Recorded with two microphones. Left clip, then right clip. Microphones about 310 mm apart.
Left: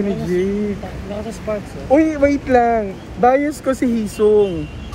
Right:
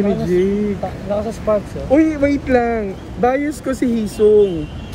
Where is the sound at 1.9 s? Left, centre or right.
Centre.